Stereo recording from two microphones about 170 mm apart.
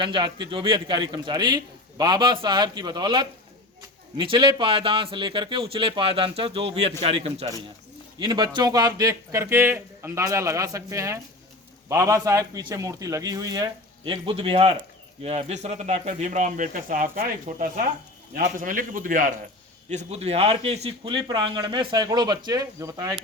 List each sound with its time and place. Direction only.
0.0 s speech: 30° right (ahead or behind); by 19.3 s 50° right (ahead or behind)
19.9 s speech: 40° right (ahead or behind); by 23.1 s 20° right (ahead or behind)